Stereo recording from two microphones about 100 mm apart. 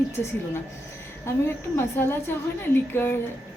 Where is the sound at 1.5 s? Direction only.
25° left (ahead or behind).